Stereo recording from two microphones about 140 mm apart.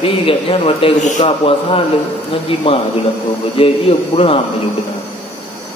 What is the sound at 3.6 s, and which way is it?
Speech, 40° left (ahead or behind).